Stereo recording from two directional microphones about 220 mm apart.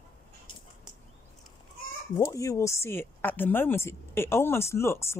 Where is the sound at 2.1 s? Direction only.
15° left (ahead or behind).